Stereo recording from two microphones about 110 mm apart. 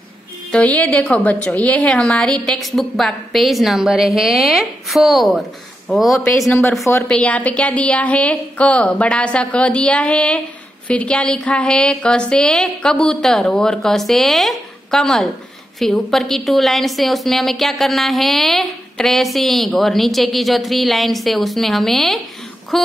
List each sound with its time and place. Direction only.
0.5 s a woman's voice: 10° left (ahead or behind)
7.1 s a woman's voice: 10° left (ahead or behind)